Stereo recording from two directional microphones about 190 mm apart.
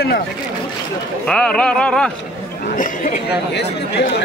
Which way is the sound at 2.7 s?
45° left (ahead or behind).